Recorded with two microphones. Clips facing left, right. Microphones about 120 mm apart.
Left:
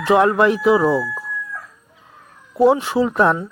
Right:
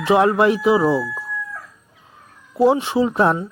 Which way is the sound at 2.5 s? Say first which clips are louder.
Left 1 dB; centre (ahead or behind).